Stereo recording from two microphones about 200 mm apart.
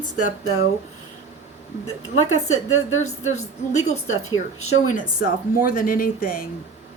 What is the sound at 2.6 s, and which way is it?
Speech, 90° left.